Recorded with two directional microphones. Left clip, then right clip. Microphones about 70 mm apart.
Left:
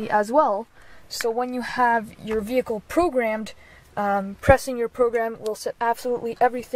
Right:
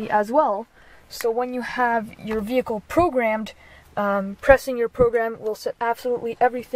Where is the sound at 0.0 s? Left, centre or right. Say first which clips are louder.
Even; centre.